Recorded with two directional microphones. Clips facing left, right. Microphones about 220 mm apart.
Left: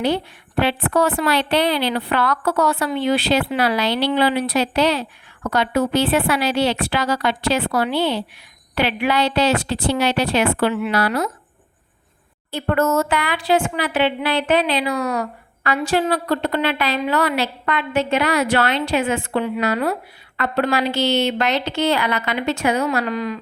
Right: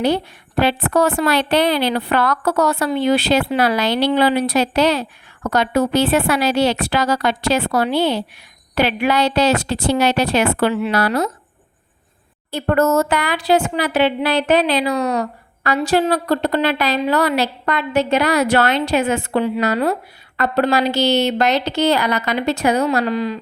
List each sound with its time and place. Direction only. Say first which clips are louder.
0.0 s a woman's voice: right 2 dB; 40° right (ahead or behind)
12.5 s a woman's voice: right 3 dB; 40° right (ahead or behind)
14.9 s a woman's voice: right 3 dB; 20° right (ahead or behind)
15.2 s a woman's voice: right 2 dB; 40° right (ahead or behind)